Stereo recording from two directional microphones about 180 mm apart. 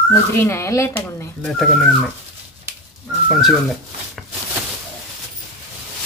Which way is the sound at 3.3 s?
Centre (ahead or behind).